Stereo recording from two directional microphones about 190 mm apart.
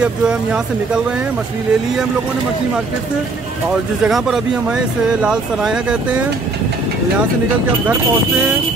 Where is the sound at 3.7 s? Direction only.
Centre (ahead or behind).